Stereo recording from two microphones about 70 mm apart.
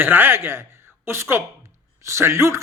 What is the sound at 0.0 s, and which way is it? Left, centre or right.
A man's voice, right.